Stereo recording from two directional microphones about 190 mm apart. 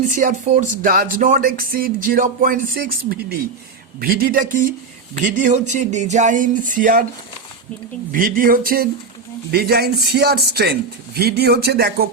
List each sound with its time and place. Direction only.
0.2 s speech: 40° right (ahead or behind)
8.1 s a man's voice: 45° right (ahead or behind)